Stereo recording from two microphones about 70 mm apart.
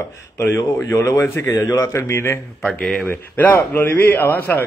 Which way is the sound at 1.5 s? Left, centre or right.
Left.